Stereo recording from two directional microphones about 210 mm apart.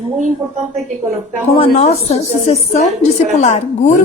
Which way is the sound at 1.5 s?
30° left (ahead or behind).